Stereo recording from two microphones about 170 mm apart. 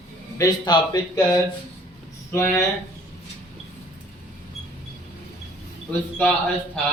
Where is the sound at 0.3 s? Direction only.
20° left (ahead or behind).